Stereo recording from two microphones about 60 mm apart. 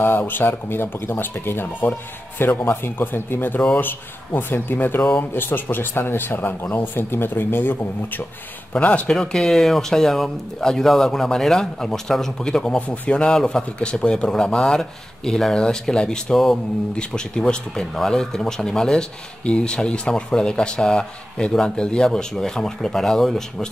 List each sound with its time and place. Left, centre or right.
0.0 s speech: left
8.7 s speech: left
9.1 s speech: centre